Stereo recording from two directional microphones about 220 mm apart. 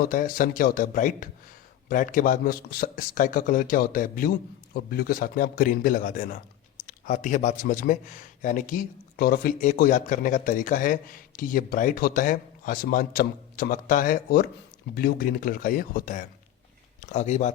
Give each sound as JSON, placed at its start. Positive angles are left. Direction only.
{"t": 0.0, "sound": "speech", "side_deg": 40}